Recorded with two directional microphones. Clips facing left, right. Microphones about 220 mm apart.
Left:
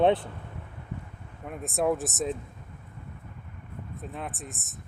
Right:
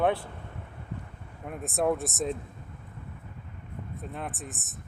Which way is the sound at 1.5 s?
Centre (ahead or behind).